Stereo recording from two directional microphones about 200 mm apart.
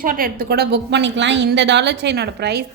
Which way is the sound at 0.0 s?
45° right (ahead or behind).